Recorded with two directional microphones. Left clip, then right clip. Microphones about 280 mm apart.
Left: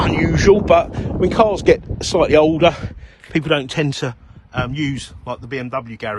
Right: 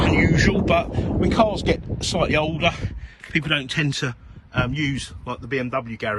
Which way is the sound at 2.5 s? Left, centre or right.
Centre.